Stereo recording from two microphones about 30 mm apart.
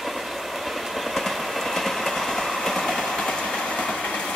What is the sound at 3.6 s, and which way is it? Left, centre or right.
Train, left.